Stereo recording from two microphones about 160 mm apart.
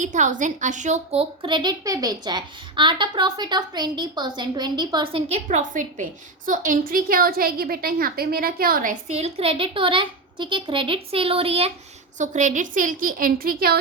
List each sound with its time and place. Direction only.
0.0 s a woman's voice: 50° right (ahead or behind); by 5.2 s 25° right (ahead or behind)
5.3 s a woman's voice: 50° right (ahead or behind)
9.0 s a child's voice: 40° right (ahead or behind)
12.2 s a woman's voice: 50° right (ahead or behind); by 13.7 s 70° right (ahead or behind)